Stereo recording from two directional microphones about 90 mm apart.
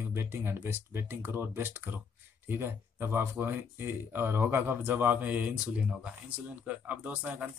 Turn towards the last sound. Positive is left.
turn(degrees=-15)  # may be behind; listen again after turning